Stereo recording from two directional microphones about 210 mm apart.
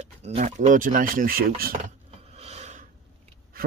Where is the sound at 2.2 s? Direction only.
30° right (ahead or behind).